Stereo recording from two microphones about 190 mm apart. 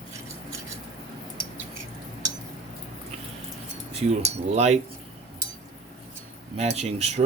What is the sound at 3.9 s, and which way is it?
Cutlery, 35° right (ahead or behind).